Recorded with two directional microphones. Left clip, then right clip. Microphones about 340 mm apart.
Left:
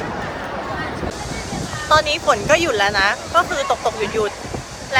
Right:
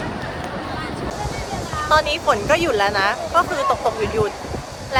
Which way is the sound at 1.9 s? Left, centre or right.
Centre.